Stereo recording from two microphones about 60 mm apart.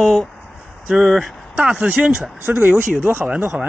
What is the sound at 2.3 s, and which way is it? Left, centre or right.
Speech, right.